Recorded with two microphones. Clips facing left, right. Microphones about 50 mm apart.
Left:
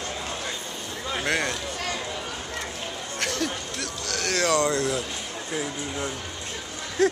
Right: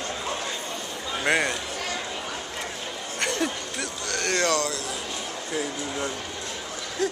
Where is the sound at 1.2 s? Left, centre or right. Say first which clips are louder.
Right 3 dB; centre.